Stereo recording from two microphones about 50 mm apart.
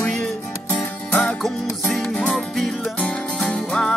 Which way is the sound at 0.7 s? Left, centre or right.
Left.